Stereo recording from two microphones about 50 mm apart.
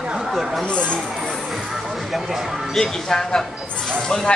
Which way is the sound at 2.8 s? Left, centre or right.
Centre.